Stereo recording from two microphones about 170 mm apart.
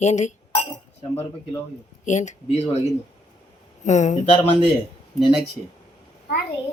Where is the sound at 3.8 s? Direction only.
45° left (ahead or behind).